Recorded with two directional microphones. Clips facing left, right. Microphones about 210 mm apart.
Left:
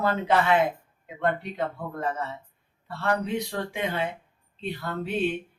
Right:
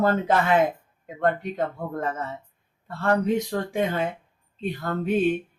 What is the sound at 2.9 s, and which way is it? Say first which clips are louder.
Speech: right 5 dB; 45° right (ahead or behind).